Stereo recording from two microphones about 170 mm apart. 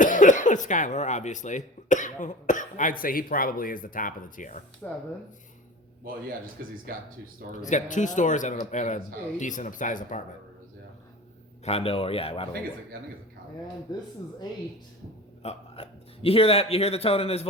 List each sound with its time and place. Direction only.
0.0 s speech: 50° left (ahead or behind)
4.8 s speech: 10° left (ahead or behind)
6.2 s speech: 60° right (ahead or behind)
7.7 s speech: 45° left (ahead or behind)
11.6 s speech: 35° left (ahead or behind)
15.4 s speech: 35° left (ahead or behind)